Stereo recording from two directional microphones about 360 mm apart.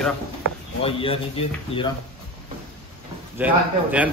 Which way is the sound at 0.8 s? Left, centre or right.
Centre.